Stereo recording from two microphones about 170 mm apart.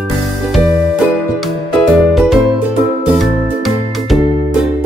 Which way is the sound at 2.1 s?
Centre (ahead or behind).